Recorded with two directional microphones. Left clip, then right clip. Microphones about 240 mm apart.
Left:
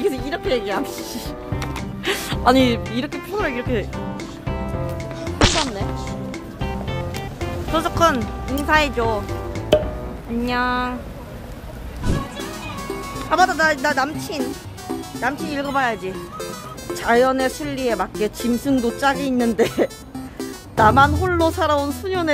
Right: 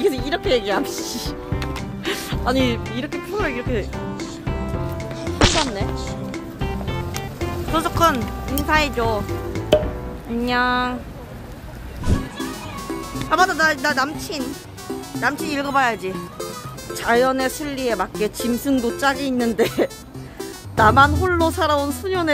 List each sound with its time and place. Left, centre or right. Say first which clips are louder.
0.5 s speech: right 2 dB; right
1.0 s music: right 2 dB; centre
1.5 s music: even; centre
2.1 s music: left 3 dB; left
2.5 s speech: left 2 dB; centre
3.1 s music: right 1 dB; centre
8.6 s speech: left 2 dB; centre
8.9 s music: even; centre
10.4 s speech: right 2 dB; centre
12.0 s music: even; centre
13.1 s speech: left 1 dB; centre
15.2 s speech: right 2 dB; centre
16.9 s speech: left 1 dB; centre